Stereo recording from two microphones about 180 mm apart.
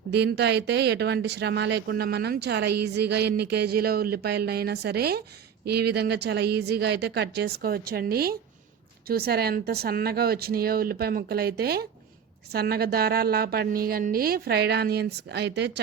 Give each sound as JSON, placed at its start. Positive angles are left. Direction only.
{"t": 0.1, "sound": "speech", "side_deg": -65}